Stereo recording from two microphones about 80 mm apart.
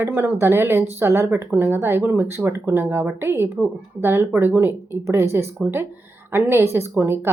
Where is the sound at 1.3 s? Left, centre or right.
Right.